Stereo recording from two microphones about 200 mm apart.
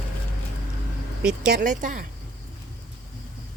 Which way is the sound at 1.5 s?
40° right (ahead or behind).